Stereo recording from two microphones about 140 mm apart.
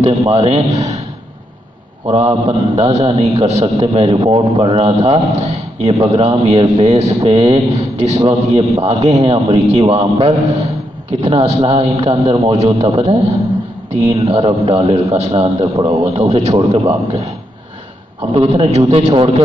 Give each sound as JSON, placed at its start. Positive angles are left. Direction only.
{"t": 0.3, "sound": "a man's voice", "side_deg": -45}
{"t": 2.0, "sound": "a man's voice", "side_deg": -45}
{"t": 14.1, "sound": "a man's voice", "side_deg": -45}
{"t": 18.3, "sound": "a man's voice", "side_deg": -45}